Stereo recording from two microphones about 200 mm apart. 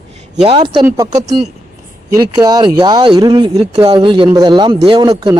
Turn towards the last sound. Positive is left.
turn(degrees=-20)  # may be behind; listen again after turning